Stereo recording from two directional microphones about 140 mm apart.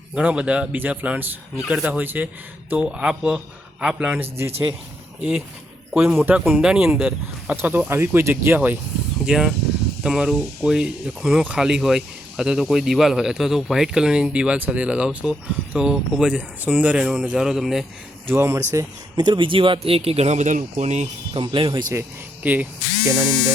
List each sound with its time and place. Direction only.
0.2 s speech: 10° right (ahead or behind)
5.9 s speech: 10° right (ahead or behind)
18.3 s speech: 20° right (ahead or behind); by 21.4 s 55° right (ahead or behind)
21.4 s speech: 35° right (ahead or behind)
22.4 s speech: 10° right (ahead or behind)
23.2 s speech: 5° left (ahead or behind)